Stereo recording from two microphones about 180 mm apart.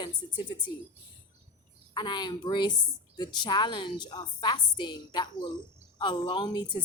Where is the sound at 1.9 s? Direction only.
25° left (ahead or behind).